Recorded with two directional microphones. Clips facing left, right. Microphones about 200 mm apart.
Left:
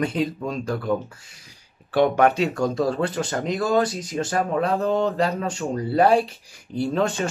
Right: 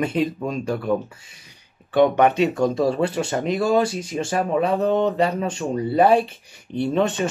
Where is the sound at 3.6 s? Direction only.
25° right (ahead or behind).